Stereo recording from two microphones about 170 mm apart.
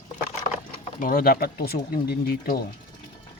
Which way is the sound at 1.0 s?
60° left (ahead or behind).